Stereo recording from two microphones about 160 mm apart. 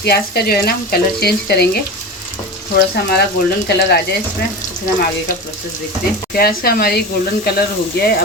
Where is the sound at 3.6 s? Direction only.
90° left.